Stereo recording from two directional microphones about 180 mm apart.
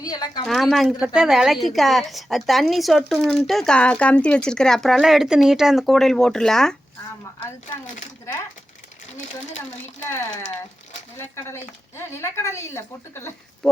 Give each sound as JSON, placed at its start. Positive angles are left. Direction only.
{"t": 0.0, "sound": "speech", "side_deg": 20}
{"t": 0.4, "sound": "a woman's voice", "side_deg": 0}
{"t": 9.6, "sound": "speech", "side_deg": 15}
{"t": 11.9, "sound": "speech", "side_deg": 15}